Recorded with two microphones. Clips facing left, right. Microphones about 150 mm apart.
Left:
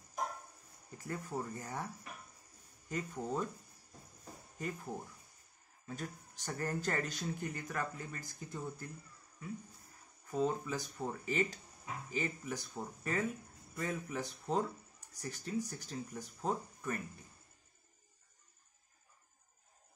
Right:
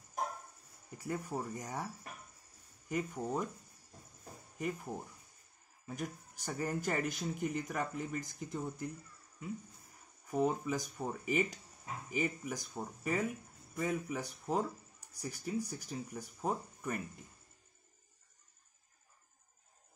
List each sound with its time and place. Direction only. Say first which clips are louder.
0.9 s speech: right 2 dB; 15° right (ahead or behind)
2.9 s speech: right 2 dB; 15° right (ahead or behind)
5.9 s speech: right 2 dB; 15° right (ahead or behind)
10.3 s speech: right 2 dB; 15° right (ahead or behind)